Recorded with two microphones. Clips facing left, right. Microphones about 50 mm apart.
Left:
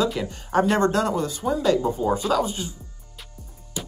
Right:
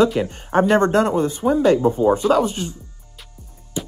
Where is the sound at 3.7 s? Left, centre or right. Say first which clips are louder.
Right 6 dB; right.